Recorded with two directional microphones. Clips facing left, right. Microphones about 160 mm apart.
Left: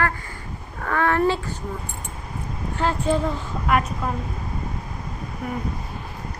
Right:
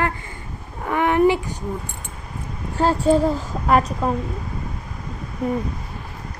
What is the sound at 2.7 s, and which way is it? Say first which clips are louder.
A woman's voice: right 5 dB; 40° right (ahead or behind).